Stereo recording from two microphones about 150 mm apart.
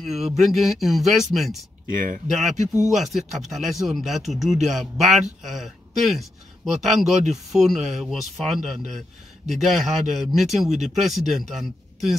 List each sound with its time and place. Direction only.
0.0 s speech: centre (ahead or behind)
1.9 s speech: 65° right (ahead or behind)
2.9 s speech: centre (ahead or behind)